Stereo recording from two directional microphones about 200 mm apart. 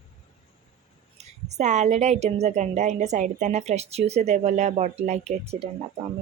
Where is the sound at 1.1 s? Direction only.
35° right (ahead or behind).